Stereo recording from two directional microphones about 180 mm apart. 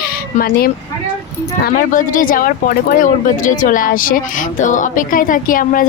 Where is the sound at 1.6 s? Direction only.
50° left (ahead or behind).